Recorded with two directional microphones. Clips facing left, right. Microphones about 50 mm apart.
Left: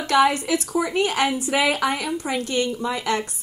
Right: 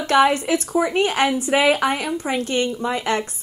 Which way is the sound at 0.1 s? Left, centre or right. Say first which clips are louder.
Right 2 dB; right.